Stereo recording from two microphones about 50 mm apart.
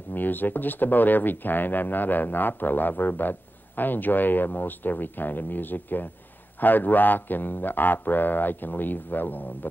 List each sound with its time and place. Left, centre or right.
0.1 s speech: left